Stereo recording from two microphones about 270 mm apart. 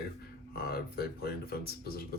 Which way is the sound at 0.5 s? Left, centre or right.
Left.